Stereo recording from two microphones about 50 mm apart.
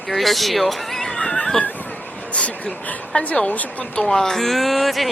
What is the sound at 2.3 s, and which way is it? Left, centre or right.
A woman's voice, left.